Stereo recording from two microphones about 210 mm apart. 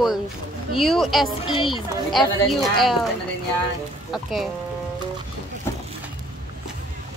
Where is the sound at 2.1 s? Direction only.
Centre (ahead or behind).